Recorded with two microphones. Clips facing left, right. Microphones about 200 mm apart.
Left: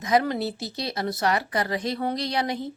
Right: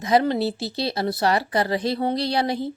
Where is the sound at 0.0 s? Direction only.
30° right (ahead or behind).